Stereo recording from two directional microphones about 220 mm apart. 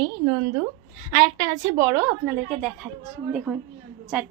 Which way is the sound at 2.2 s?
Centre (ahead or behind).